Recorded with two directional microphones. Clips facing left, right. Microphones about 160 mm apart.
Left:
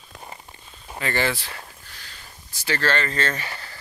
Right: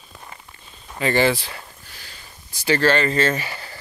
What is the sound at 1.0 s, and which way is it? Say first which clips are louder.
Speech: right 6 dB; 15° right (ahead or behind).